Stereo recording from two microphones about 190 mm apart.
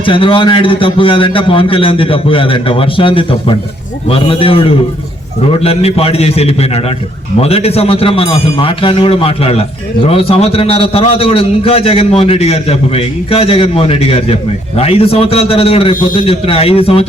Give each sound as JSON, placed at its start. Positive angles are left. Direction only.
{"t": 0.0, "sound": "a man's voice", "side_deg": 25}